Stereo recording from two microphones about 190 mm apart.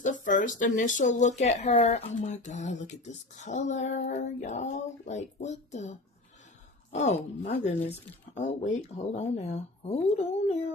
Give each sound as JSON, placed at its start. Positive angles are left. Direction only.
{"t": 0.0, "sound": "speech", "side_deg": 40}